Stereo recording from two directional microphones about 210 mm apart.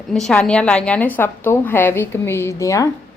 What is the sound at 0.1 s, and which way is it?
A woman's voice, 5° left (ahead or behind).